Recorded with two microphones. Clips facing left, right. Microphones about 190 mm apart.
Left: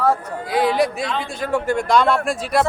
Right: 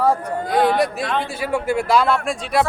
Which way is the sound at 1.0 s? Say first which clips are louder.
Right 2 dB; 55° right (ahead or behind).